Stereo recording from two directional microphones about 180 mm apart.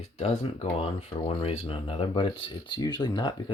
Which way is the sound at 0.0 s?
35° left (ahead or behind).